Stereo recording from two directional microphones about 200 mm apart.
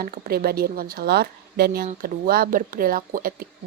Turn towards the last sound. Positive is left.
turn(degrees=-45)  # may be behind; listen again after turning